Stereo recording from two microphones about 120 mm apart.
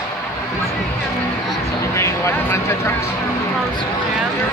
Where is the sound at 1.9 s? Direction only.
25° left (ahead or behind).